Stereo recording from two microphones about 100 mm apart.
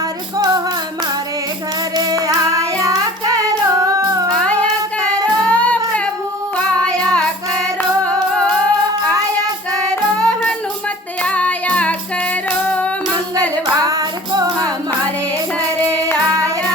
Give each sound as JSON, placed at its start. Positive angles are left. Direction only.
{"t": 0.3, "sound": "music", "side_deg": -45}
{"t": 2.8, "sound": "child singing", "side_deg": -35}
{"t": 4.3, "sound": "music", "side_deg": 10}
{"t": 6.8, "sound": "child singing", "side_deg": 10}
{"t": 7.8, "sound": "singing", "side_deg": 10}
{"t": 9.9, "sound": "child singing", "side_deg": 10}
{"t": 11.2, "sound": "singing", "side_deg": 15}
{"t": 12.5, "sound": "female singing", "side_deg": 15}
{"t": 13.7, "sound": "singing", "side_deg": -40}
{"t": 16.3, "sound": "child singing", "side_deg": -35}